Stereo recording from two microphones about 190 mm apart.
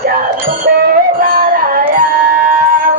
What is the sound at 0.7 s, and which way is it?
Music, 50° right (ahead or behind).